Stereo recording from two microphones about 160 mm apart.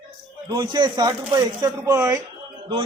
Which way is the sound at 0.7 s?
25° right (ahead or behind).